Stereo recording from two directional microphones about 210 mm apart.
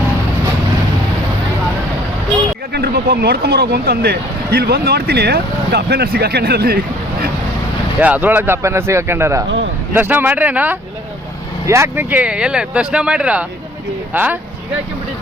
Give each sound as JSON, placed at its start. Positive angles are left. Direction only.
{"t": 2.7, "sound": "speech", "side_deg": -50}
{"t": 7.9, "sound": "speech", "side_deg": -5}